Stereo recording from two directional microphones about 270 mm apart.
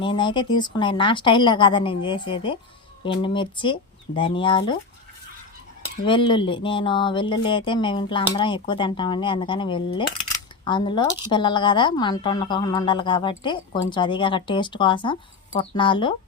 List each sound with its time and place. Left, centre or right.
0.0 s a woman's voice: centre
6.1 s a woman's voice: centre